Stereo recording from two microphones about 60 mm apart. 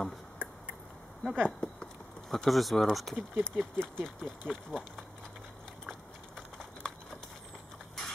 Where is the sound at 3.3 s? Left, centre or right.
Right.